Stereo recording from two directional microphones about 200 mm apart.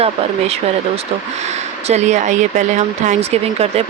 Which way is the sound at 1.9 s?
35° right (ahead or behind).